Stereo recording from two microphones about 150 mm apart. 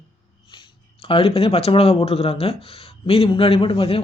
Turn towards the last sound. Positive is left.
turn(degrees=40)  # may be behind; listen again after turning